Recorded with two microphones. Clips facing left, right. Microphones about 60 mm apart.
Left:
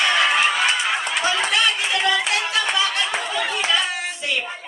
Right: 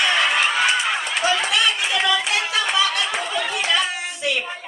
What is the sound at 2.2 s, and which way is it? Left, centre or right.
Music, left.